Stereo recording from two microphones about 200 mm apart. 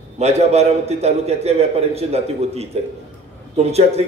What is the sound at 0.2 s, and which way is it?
A man's voice, 35° right (ahead or behind).